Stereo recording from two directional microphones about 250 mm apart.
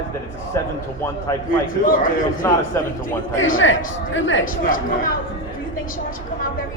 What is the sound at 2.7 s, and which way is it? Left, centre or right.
Speech, centre.